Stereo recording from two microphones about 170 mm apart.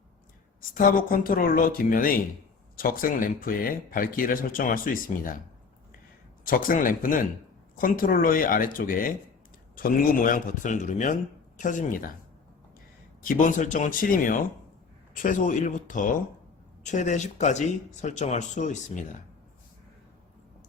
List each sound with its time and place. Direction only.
0.7 s speech: 55° left (ahead or behind)
6.4 s speech: 55° left (ahead or behind)
13.2 s speech: 50° left (ahead or behind)